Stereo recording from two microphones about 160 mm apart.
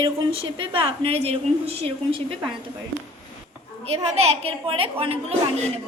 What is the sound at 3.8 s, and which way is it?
A woman's voice, 40° right (ahead or behind).